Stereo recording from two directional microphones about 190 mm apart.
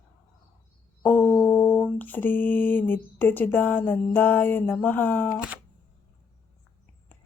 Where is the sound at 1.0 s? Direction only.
10° left (ahead or behind).